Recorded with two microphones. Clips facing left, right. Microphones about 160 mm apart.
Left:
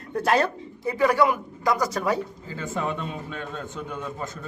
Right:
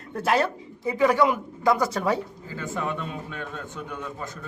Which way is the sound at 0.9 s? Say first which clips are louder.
Even; 20° right (ahead or behind).